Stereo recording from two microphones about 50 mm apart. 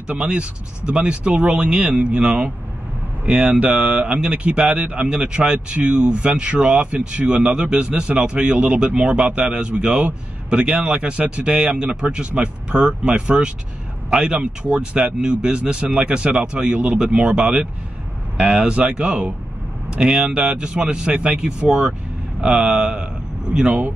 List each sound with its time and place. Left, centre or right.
0.1 s speech: right